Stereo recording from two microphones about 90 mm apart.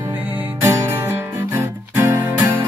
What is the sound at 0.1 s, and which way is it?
Music, 20° right (ahead or behind).